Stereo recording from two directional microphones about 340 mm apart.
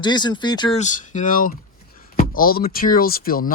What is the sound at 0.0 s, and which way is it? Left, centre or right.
Speech, centre.